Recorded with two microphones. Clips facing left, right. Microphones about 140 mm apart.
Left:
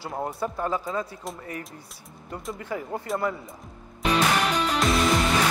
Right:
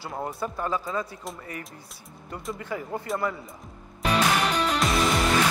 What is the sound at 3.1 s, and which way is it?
Speech, centre (ahead or behind).